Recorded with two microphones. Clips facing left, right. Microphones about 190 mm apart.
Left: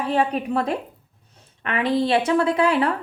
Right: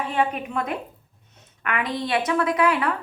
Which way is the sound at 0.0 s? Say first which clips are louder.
Left 3 dB; 35° left (ahead or behind).